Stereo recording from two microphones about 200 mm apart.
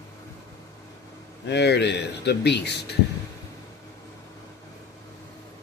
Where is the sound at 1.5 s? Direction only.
60° left (ahead or behind).